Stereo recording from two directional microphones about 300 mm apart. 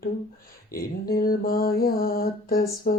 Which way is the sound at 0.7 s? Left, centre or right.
Left.